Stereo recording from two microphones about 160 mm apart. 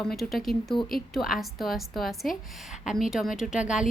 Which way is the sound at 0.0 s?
Centre (ahead or behind).